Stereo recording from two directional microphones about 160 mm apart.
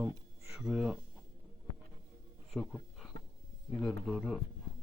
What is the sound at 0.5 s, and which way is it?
Speech, 5° right (ahead or behind).